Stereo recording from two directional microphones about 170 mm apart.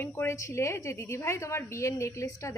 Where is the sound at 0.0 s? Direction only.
10° left (ahead or behind).